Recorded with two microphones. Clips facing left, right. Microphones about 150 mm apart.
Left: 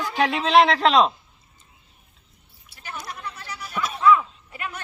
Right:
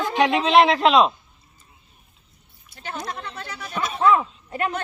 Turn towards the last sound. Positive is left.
turn(degrees=-45)  # may be behind; listen again after turning